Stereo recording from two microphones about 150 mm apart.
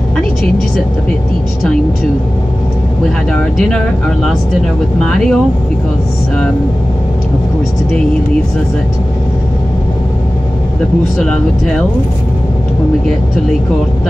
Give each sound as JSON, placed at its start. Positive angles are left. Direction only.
{"t": 3.5, "sound": "speech", "side_deg": 5}
{"t": 11.1, "sound": "speech", "side_deg": 5}